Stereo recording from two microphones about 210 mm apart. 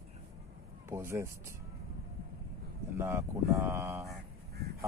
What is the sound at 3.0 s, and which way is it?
Speech, 15° right (ahead or behind).